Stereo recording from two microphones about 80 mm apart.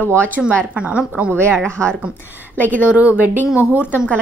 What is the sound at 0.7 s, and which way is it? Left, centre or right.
Speech, centre.